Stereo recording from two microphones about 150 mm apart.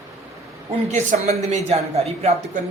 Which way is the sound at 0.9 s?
50° right (ahead or behind).